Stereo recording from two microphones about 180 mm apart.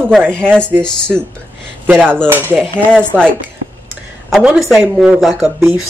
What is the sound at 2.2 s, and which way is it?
Speech, 10° right (ahead or behind).